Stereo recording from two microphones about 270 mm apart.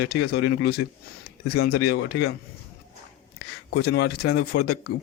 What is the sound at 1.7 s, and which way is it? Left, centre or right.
Speech, left.